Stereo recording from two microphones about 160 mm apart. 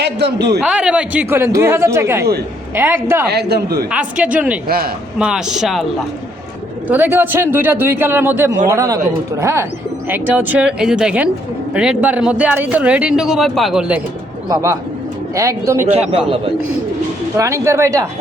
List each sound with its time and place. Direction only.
0.0 s a man's voice: 90° right
0.6 s speech: 5° right (ahead or behind)
3.2 s a man's voice: 90° right
3.9 s speech: 10° right (ahead or behind)
6.8 s speech: 10° right (ahead or behind)
14.5 s speech: 20° right (ahead or behind)
17.3 s speech: 20° right (ahead or behind)